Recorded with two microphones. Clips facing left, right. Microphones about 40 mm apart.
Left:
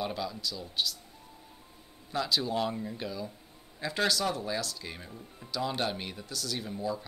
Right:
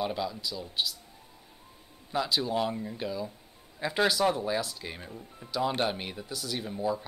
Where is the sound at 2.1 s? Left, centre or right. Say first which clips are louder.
Right 1 dB; centre.